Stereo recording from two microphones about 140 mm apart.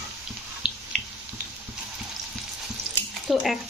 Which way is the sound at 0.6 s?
35° left (ahead or behind).